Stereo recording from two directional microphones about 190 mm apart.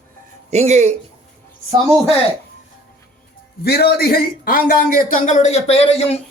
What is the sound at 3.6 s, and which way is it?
A man's voice, 55° left (ahead or behind).